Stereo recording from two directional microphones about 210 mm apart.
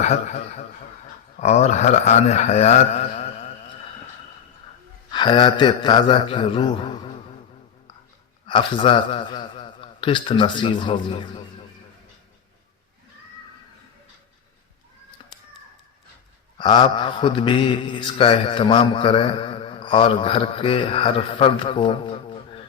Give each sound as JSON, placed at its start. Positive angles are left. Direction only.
{"t": 0.0, "sound": "speech", "side_deg": 30}
{"t": 5.1, "sound": "mantra", "side_deg": 20}
{"t": 8.4, "sound": "a man's voice", "side_deg": 25}
{"t": 15.2, "sound": "a sound", "side_deg": 25}
{"t": 16.6, "sound": "mantra", "side_deg": 20}